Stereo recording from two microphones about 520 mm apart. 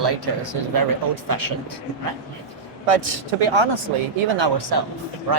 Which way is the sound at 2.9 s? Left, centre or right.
Right.